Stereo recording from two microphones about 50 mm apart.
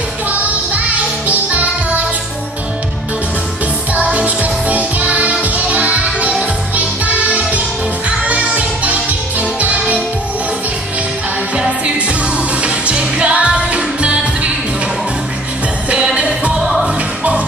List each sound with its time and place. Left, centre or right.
0.3 s music: right
3.9 s music: right
11.5 s music: centre
16.2 s music: right
16.5 s music: centre